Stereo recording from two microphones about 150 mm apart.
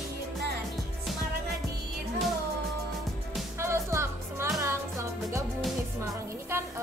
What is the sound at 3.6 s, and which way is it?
Music, 15° right (ahead or behind).